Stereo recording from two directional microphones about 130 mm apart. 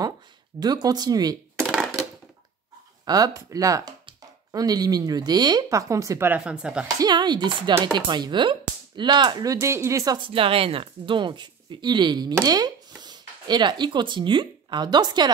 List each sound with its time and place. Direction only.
0.6 s speech: 30° right (ahead or behind)
1.7 s a sound: centre (ahead or behind)
3.1 s speech: 25° right (ahead or behind)
6.4 s speech: 5° right (ahead or behind)
7.0 s speech: 35° right (ahead or behind)
10.1 s speech: 40° right (ahead or behind)